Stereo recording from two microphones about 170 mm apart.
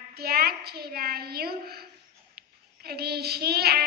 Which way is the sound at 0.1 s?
65° right (ahead or behind).